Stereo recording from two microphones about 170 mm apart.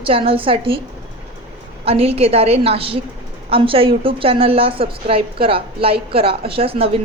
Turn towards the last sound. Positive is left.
turn(degrees=-35)  # may be behind; listen again after turning